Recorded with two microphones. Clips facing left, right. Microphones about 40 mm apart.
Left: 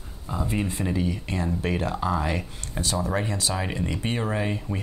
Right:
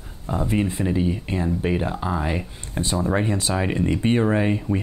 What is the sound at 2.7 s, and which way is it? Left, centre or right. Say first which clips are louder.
Speech: right 4 dB; right.